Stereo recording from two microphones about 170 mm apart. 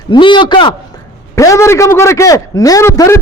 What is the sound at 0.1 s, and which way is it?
A man's voice, 30° left (ahead or behind).